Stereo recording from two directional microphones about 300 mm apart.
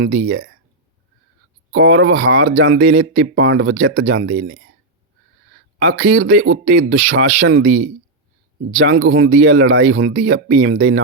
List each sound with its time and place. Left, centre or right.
0.0 s speech: right
1.7 s speech: right
5.8 s speech: right